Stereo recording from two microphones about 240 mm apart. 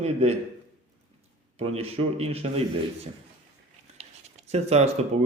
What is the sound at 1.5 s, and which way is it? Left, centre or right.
Speech, right.